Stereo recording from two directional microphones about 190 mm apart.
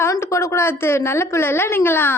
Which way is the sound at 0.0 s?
15° left (ahead or behind).